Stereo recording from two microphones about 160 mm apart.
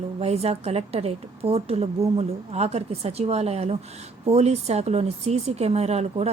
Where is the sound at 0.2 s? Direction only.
40° right (ahead or behind).